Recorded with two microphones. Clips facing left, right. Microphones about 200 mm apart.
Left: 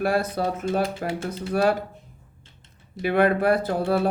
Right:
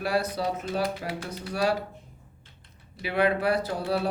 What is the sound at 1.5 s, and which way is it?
Speech, 50° left (ahead or behind).